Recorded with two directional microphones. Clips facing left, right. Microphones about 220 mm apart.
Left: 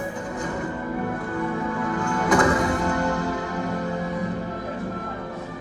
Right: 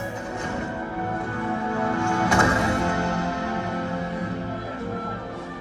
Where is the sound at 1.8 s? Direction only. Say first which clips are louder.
Right 3 dB; 25° right (ahead or behind).